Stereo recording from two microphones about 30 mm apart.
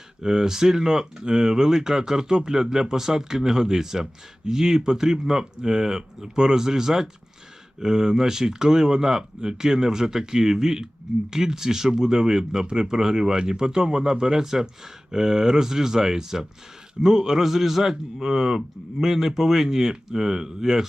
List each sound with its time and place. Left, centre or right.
0.2 s speech: right